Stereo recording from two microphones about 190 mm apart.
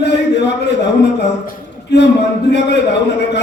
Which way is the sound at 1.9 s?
65° left (ahead or behind).